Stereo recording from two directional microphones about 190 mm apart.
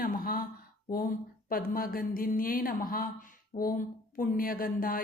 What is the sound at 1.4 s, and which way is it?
Speech, 50° left (ahead or behind).